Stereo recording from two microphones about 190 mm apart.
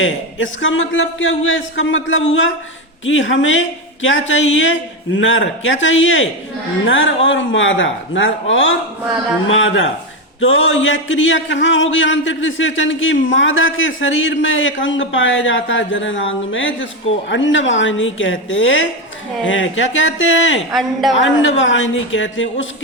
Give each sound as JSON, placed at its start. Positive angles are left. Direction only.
{"t": 0.0, "sound": "a man's voice", "side_deg": 85}
{"t": 21.2, "sound": "a man's voice", "side_deg": 80}